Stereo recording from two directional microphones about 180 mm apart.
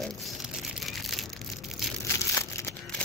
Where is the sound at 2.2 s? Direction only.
15° left (ahead or behind).